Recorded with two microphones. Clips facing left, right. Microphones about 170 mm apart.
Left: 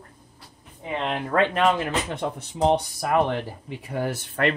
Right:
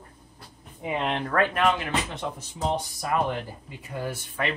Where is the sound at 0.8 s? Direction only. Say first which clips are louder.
Even; 10° right (ahead or behind).